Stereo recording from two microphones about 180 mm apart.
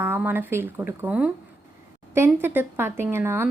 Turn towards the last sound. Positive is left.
turn(degrees=-15)  # may be behind; listen again after turning